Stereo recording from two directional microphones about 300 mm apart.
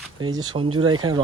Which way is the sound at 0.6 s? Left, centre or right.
Right.